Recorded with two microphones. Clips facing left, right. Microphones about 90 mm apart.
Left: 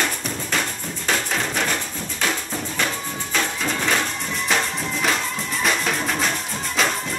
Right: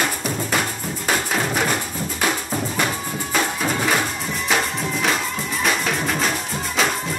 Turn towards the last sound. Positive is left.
turn(degrees=-5)  # may be behind; listen again after turning